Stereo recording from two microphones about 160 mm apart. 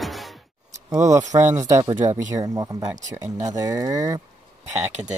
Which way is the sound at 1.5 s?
20° right (ahead or behind).